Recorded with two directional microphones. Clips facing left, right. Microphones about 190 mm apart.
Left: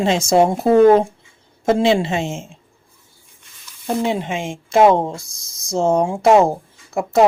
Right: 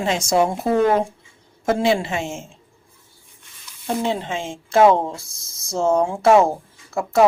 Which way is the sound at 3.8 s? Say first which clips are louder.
Left 3 dB; 10° left (ahead or behind).